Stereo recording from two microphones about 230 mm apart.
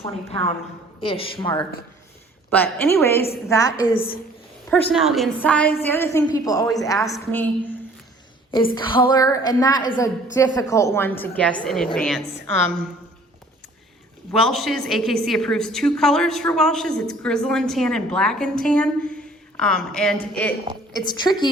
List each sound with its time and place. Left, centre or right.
0.3 s a woman's voice: left
2.5 s a woman's voice: centre
3.8 s a woman's voice: left
4.7 s a woman's voice: centre
8.7 s a woman's voice: left; by 12.3 s centre
14.4 s a woman's voice: centre
20.9 s a woman's voice: centre